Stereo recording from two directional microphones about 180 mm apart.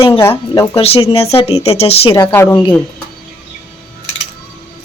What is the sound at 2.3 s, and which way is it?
Speech, 10° left (ahead or behind).